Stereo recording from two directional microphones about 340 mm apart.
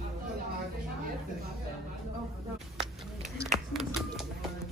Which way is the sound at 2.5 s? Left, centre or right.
Centre.